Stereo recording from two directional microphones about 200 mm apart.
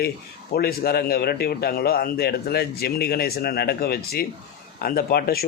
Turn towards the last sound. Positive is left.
turn(degrees=50)  # may be behind; listen again after turning